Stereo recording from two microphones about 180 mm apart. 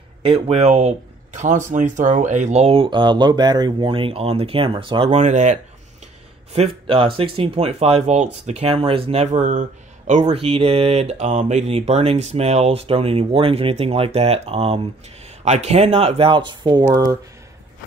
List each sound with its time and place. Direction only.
0.2 s speech: 30° right (ahead or behind)
10.3 s speech: 30° right (ahead or behind)